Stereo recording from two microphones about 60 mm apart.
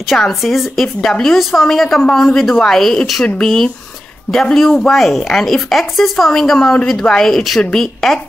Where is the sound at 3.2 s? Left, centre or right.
Centre.